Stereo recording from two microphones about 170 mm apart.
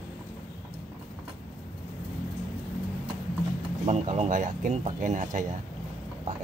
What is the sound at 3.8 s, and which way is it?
Speech, 40° right (ahead or behind).